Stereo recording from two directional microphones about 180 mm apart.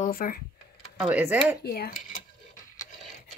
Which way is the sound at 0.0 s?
50° left (ahead or behind).